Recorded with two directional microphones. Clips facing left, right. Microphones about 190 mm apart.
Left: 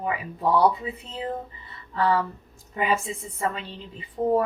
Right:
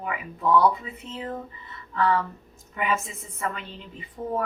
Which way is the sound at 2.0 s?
30° left (ahead or behind).